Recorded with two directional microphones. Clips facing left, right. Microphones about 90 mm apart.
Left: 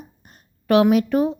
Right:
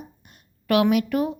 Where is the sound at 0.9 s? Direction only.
30° left (ahead or behind).